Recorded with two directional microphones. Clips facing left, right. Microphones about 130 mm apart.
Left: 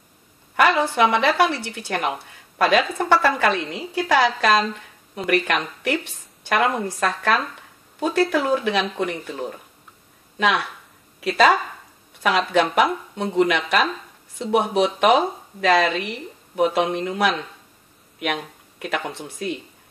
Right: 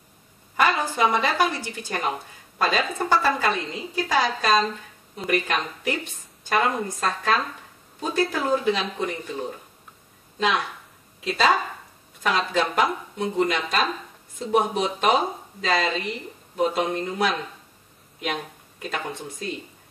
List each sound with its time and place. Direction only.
0.6 s a woman's voice: 75° left (ahead or behind)
11.1 s a woman's voice: 75° left (ahead or behind)
18.9 s speech: centre (ahead or behind)